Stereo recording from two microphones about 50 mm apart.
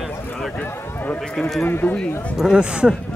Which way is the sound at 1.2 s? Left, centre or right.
Centre.